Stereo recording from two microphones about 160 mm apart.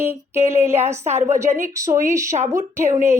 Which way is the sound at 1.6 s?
20° right (ahead or behind).